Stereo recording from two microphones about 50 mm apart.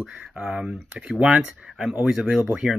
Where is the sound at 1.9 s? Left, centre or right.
Centre.